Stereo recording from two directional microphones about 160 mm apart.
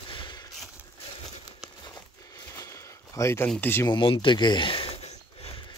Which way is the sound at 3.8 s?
30° left (ahead or behind).